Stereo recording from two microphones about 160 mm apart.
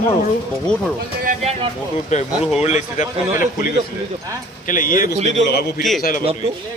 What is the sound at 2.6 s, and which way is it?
Speech, 45° left (ahead or behind).